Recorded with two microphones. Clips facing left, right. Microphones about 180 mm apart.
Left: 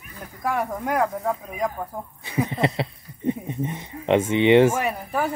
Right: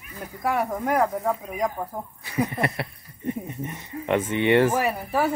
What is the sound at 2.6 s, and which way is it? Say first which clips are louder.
Speech: left 4 dB; 20° left (ahead or behind).